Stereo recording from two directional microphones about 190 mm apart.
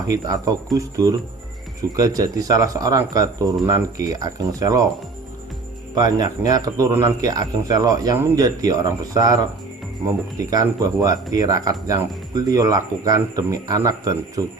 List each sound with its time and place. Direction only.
0.1 s a man's voice: 20° right (ahead or behind)
5.9 s a man's voice: 20° right (ahead or behind)
10.5 s a man's voice: 20° right (ahead or behind)